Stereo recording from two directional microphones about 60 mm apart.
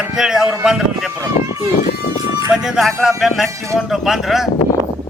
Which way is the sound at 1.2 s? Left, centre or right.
Right.